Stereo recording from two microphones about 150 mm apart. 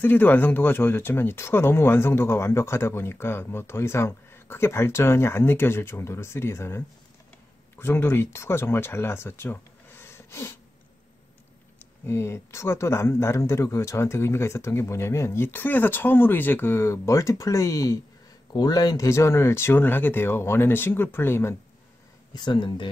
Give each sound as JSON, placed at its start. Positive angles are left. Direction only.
{"t": 0.0, "sound": "speech", "side_deg": 15}
{"t": 12.1, "sound": "speech", "side_deg": 15}
{"t": 22.3, "sound": "speech", "side_deg": 30}